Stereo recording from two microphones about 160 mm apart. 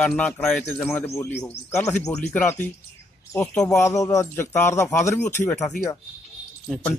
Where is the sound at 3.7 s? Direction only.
20° left (ahead or behind).